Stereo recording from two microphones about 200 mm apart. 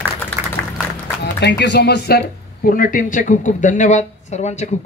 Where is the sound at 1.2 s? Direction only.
60° left (ahead or behind).